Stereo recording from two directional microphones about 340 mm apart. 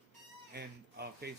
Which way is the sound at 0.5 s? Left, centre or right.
Right.